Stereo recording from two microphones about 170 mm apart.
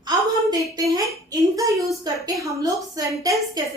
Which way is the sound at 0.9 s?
20° right (ahead or behind).